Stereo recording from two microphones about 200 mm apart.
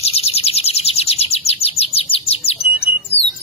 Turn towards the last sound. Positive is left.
turn(degrees=30)  # may be behind; listen again after turning